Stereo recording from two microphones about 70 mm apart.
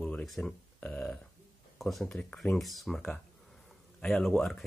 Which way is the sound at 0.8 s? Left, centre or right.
Centre.